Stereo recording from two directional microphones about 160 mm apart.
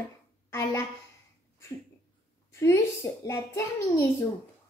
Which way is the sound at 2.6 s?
20° left (ahead or behind).